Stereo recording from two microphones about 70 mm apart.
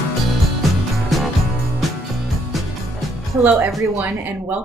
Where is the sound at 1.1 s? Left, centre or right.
Centre.